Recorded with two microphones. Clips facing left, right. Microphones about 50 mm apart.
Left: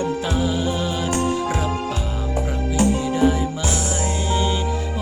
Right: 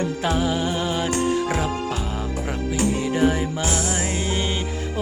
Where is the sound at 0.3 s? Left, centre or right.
Right.